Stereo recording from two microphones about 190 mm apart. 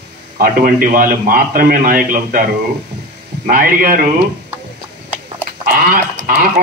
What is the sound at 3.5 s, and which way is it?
Speech, 50° right (ahead or behind).